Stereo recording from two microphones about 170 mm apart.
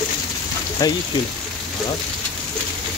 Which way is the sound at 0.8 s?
20° left (ahead or behind).